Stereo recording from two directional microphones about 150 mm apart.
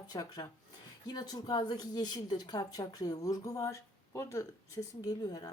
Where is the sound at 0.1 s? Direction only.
25° left (ahead or behind).